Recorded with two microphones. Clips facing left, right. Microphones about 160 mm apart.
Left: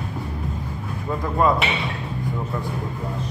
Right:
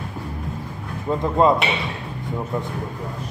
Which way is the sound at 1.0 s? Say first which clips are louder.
Right 3 dB; 25° right (ahead or behind).